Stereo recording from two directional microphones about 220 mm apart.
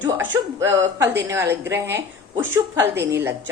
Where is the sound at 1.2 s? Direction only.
15° right (ahead or behind).